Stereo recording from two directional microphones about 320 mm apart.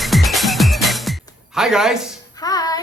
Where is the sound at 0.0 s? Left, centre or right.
Centre.